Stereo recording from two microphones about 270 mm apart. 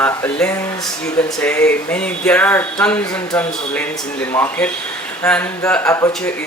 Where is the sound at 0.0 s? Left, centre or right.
Centre.